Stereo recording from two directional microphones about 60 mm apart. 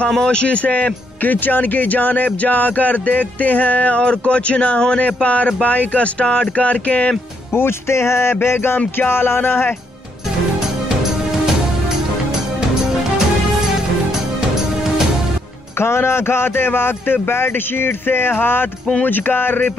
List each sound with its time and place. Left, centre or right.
0.1 s speech: centre
7.5 s music: left
8.7 s speech: left
15.8 s speech: left